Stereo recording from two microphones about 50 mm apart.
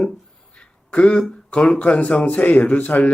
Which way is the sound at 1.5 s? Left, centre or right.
Centre.